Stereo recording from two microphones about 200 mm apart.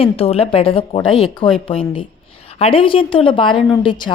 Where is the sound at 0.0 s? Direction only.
30° left (ahead or behind).